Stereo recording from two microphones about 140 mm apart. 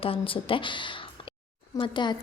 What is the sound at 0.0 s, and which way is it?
A woman's voice, 40° left (ahead or behind).